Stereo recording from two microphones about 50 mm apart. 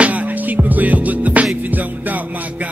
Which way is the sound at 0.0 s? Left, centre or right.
Right.